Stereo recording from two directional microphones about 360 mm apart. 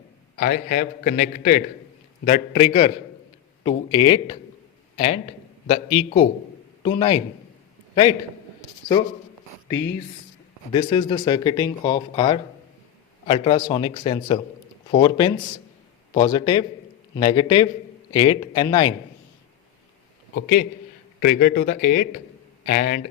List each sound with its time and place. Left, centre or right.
0.3 s a man's voice: left
10.7 s speech: centre
20.3 s a man's voice: left